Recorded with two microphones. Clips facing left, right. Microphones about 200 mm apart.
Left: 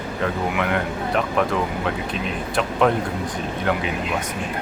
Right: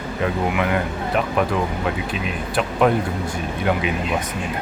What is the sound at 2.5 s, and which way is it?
Speech, 5° right (ahead or behind).